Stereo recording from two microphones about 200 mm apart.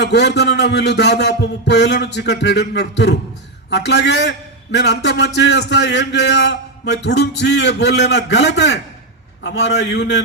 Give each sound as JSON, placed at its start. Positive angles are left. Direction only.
{"t": 0.0, "sound": "a man's voice", "side_deg": 60}